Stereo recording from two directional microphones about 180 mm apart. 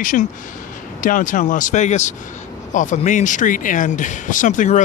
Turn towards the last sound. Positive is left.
turn(degrees=45)  # may be behind; listen again after turning